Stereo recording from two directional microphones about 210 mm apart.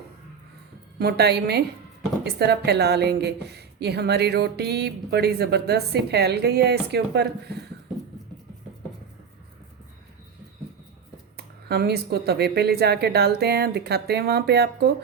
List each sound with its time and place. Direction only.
0.9 s a woman's voice: 50° right (ahead or behind)
11.3 s a woman's voice: 50° right (ahead or behind)